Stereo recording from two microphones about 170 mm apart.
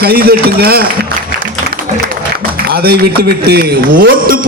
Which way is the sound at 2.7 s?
65° right (ahead or behind).